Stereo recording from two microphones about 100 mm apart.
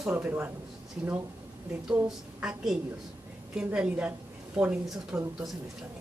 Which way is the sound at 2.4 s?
5° right (ahead or behind).